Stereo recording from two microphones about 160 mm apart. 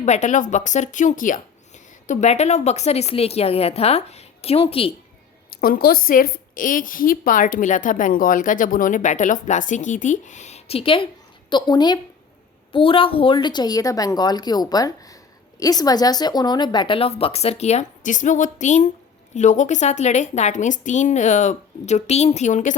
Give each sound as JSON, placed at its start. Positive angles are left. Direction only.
{"t": 0.0, "sound": "a woman's voice", "side_deg": 50}
{"t": 2.0, "sound": "speech", "side_deg": 45}
{"t": 5.5, "sound": "a woman's voice", "side_deg": 65}